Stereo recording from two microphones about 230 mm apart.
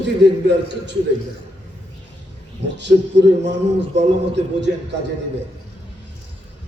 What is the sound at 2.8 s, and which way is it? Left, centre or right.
A man's voice, right.